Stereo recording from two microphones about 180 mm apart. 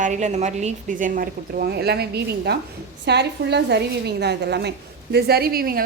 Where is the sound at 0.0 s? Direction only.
40° right (ahead or behind).